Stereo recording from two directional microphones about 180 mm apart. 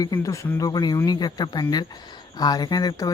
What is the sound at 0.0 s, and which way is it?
Speech, 20° left (ahead or behind).